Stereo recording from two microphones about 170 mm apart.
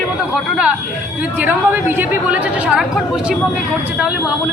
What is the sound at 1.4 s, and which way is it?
Speech, 10° right (ahead or behind).